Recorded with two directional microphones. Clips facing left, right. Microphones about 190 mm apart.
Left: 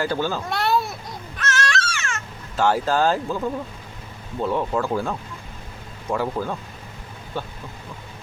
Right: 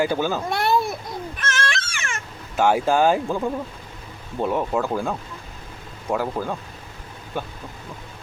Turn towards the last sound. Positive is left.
turn(degrees=-15)  # may be behind; listen again after turning